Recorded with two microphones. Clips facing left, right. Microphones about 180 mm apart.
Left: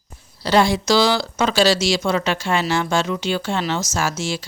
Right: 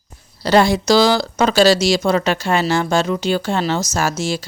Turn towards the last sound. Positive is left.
turn(degrees=-40)  # may be behind; listen again after turning